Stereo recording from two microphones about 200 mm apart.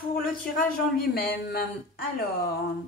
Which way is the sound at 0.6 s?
50° left (ahead or behind).